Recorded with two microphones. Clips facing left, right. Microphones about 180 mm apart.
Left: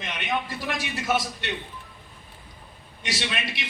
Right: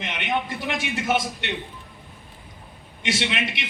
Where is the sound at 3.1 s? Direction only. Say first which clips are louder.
Right 5 dB; 20° right (ahead or behind).